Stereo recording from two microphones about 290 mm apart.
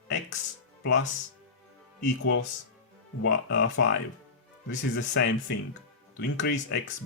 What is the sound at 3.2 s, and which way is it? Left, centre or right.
Speech, left.